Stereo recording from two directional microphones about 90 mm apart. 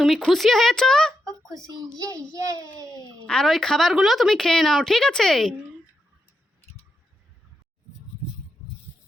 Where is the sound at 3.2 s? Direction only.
5° left (ahead or behind).